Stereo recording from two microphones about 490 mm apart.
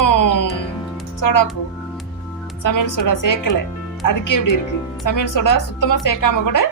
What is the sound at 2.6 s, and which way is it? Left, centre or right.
Speech, left.